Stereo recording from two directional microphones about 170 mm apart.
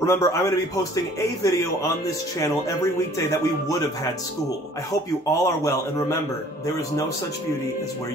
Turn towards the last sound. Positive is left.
turn(degrees=20)  # may be behind; listen again after turning